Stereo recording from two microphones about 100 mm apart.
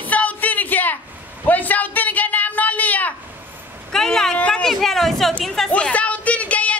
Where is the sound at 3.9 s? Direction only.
5° left (ahead or behind).